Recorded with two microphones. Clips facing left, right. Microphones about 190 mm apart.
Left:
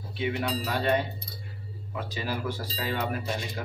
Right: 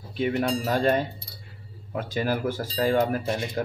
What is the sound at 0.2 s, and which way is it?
Speech, 45° right (ahead or behind).